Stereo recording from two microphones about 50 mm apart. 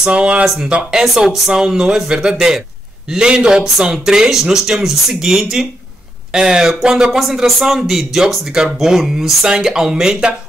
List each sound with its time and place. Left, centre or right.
0.0 s speech: right
1.0 s speech: centre
7.1 s speech: centre